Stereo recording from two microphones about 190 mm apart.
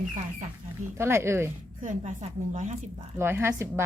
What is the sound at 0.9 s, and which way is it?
Speech, 15° right (ahead or behind).